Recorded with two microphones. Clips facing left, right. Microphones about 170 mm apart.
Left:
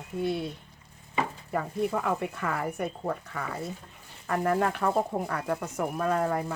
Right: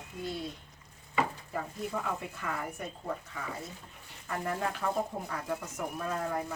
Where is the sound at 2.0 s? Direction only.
60° left (ahead or behind).